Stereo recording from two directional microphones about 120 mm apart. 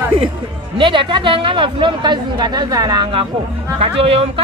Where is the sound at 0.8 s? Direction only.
45° right (ahead or behind).